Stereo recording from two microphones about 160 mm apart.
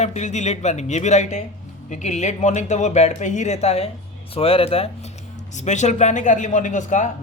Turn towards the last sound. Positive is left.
turn(degrees=50)  # may be behind; listen again after turning